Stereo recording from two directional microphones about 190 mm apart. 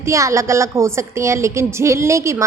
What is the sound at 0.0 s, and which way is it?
A woman's voice, 15° right (ahead or behind).